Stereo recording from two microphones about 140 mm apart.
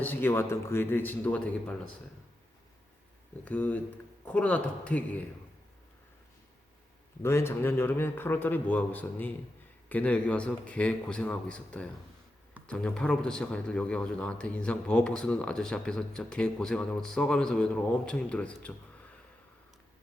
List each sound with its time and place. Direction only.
0.0 s speech: 15° left (ahead or behind)
3.4 s speech: 10° left (ahead or behind)
7.2 s speech: 20° left (ahead or behind)